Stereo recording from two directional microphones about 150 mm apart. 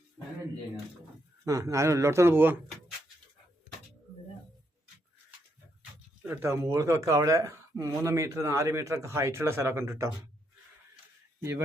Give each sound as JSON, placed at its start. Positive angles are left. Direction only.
{"t": 1.5, "sound": "speech", "side_deg": -20}
{"t": 6.2, "sound": "speech", "side_deg": -15}